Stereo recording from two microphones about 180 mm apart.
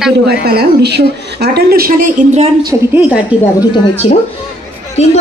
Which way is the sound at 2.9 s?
10° right (ahead or behind).